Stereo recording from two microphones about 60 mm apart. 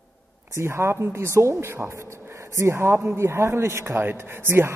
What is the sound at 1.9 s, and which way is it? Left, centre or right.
Speech, right.